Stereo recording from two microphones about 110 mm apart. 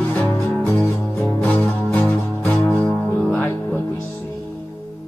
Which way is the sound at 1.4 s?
15° left (ahead or behind).